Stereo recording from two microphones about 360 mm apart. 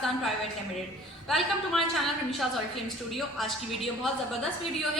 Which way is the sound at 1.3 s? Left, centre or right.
Centre.